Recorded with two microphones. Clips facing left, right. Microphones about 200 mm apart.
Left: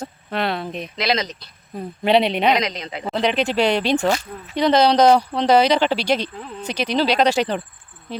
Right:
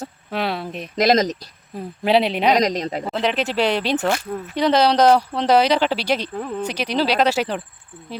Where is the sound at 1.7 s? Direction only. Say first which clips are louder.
Left 1 dB; 5° right (ahead or behind).